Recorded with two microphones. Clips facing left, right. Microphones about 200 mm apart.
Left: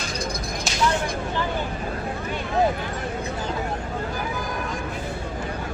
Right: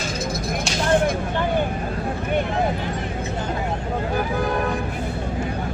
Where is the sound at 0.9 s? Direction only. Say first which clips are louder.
Right 8 dB; 55° right (ahead or behind).